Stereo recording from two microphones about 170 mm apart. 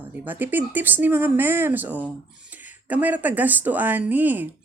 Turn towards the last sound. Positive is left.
turn(degrees=-10)  # may be behind; listen again after turning